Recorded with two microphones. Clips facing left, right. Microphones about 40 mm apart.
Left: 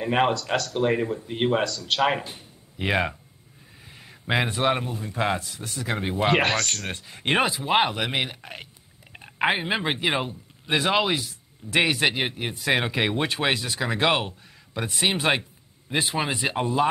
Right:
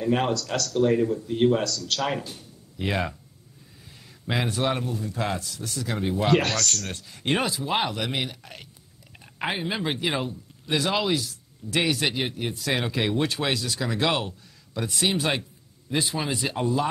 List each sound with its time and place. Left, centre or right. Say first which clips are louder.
0.0 s speech: left 2 dB; left